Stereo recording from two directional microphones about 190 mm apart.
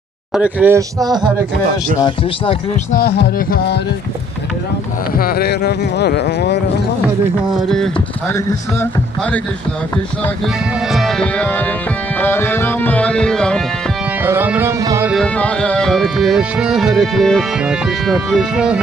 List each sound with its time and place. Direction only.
0.3 s music: 5° right (ahead or behind)
2.0 s speech: 25° left (ahead or behind)
2.9 s speech: 55° left (ahead or behind)
5.1 s speech: 55° left (ahead or behind)
7.5 s music: centre (ahead or behind)
10.9 s music: centre (ahead or behind)
14.2 s music: 10° right (ahead or behind)
15.1 s music: 5° left (ahead or behind)